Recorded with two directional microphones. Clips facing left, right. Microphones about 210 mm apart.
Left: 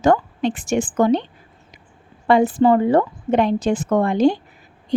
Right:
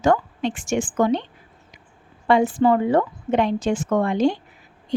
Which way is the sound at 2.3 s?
35° left (ahead or behind).